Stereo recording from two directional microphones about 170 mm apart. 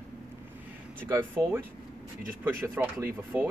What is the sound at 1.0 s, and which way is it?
Speech, 10° right (ahead or behind).